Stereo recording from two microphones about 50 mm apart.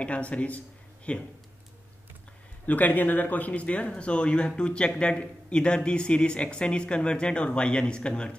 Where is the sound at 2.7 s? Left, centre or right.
Left.